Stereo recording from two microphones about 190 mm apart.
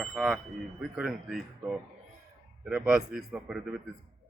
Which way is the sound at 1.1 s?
Centre (ahead or behind).